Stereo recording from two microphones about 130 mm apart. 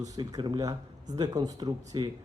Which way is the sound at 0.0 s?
30° right (ahead or behind).